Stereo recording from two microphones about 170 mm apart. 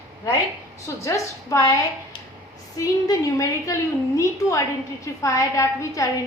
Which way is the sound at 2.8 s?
20° left (ahead or behind).